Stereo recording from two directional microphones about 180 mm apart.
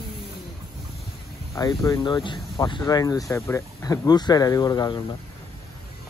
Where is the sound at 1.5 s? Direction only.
20° left (ahead or behind).